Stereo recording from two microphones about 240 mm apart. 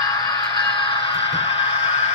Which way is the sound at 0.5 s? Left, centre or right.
Centre.